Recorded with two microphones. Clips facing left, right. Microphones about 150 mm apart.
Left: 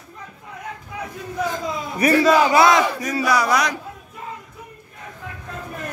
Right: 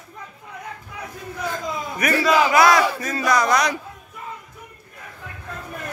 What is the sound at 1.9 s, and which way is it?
Speech, 30° left (ahead or behind).